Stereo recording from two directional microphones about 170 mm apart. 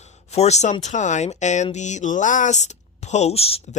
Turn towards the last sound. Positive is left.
turn(degrees=35)  # may be behind; listen again after turning